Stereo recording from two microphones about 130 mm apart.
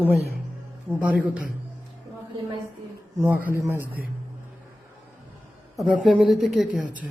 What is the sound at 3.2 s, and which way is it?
Speech, 15° right (ahead or behind).